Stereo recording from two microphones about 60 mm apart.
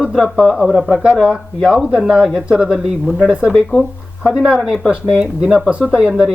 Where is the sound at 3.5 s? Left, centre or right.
Centre.